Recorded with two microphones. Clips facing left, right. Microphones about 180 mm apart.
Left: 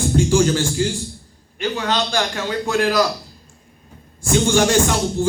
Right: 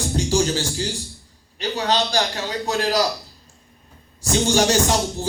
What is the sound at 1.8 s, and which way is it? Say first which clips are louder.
Speech: right 1 dB; 35° right (ahead or behind).